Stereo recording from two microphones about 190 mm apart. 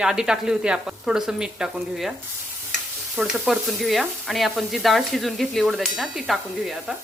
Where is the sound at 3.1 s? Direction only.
Centre (ahead or behind).